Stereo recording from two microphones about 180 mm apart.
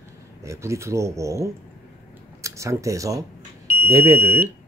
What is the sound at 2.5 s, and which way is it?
Speech, 15° right (ahead or behind).